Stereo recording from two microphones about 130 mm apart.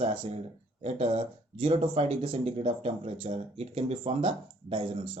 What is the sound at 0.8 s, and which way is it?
Speech, 50° right (ahead or behind).